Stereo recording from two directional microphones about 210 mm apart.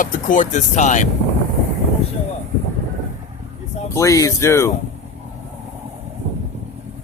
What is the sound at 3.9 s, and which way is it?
Speech, 15° left (ahead or behind).